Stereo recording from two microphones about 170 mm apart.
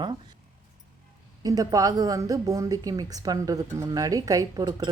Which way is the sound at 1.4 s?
20° right (ahead or behind).